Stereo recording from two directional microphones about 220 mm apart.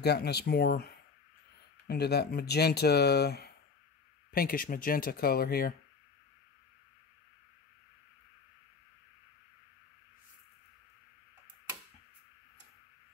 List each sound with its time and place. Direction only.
0.0 s speech: 45° left (ahead or behind)